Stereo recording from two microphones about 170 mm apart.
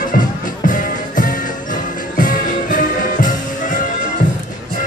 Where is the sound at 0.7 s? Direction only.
50° left (ahead or behind).